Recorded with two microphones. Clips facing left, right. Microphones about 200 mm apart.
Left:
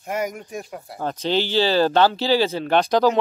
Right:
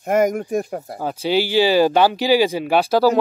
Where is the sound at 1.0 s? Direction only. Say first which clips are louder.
Right 2 dB; 10° right (ahead or behind).